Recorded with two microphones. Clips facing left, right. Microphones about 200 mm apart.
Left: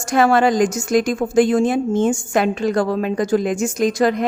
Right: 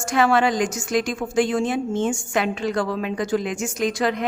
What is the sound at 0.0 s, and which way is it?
A woman's voice, 40° left (ahead or behind).